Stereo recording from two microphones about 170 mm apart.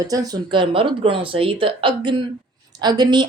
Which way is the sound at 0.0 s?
20° right (ahead or behind).